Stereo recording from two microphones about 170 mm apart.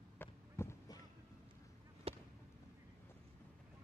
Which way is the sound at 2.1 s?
35° right (ahead or behind).